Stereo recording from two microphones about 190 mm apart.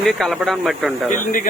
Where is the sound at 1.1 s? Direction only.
45° left (ahead or behind).